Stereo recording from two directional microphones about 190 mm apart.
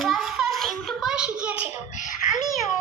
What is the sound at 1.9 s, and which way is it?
Speech, 40° left (ahead or behind).